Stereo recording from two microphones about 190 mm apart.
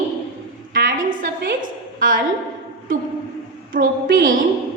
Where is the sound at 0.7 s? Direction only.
45° right (ahead or behind).